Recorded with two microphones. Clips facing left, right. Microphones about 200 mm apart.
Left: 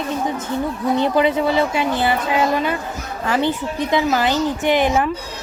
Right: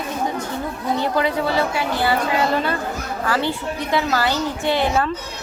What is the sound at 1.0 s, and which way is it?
A woman's voice, 20° left (ahead or behind).